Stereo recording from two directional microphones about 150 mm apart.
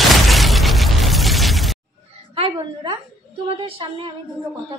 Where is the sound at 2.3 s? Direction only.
35° right (ahead or behind).